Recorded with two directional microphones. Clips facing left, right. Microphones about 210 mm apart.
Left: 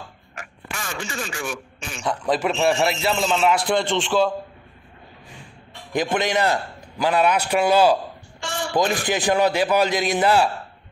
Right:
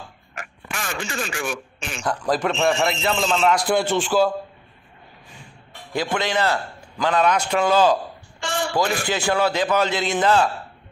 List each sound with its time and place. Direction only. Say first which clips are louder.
0.7 s speech: right 2 dB; 75° right (ahead or behind)
2.0 s a man's voice: even; centre (ahead or behind)
5.9 s a man's voice: left 2 dB; 20° left (ahead or behind)
8.4 s a sound: right 3 dB; 90° right
8.7 s a man's voice: left 3 dB; 20° left (ahead or behind)